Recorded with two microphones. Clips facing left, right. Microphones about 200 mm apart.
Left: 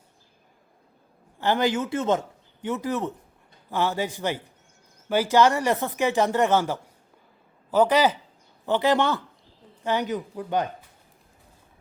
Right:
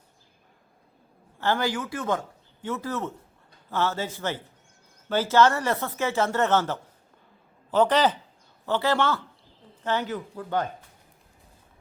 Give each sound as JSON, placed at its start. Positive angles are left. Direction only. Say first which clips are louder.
{"t": 1.4, "sound": "speech", "louder": "left 3 dB", "side_deg": 20}